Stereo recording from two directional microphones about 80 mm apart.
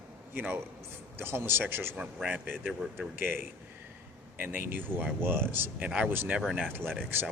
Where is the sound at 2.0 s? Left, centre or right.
Centre.